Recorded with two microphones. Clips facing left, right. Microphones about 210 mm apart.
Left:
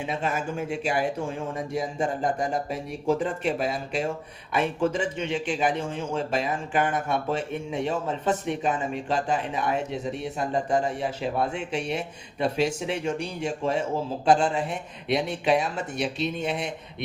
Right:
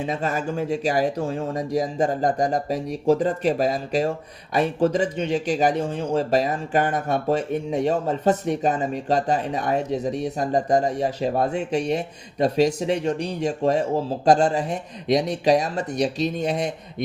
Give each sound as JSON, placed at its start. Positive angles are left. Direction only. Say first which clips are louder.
{"t": 0.0, "sound": "a man's voice", "louder": "right 3 dB", "side_deg": -40}